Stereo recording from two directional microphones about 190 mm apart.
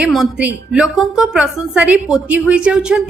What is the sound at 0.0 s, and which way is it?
A woman's voice, 5° right (ahead or behind).